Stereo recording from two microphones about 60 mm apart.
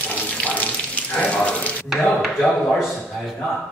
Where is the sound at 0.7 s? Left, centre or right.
Centre.